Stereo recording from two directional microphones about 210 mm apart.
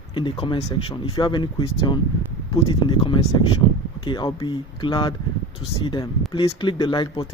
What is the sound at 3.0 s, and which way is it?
Speech, 25° left (ahead or behind).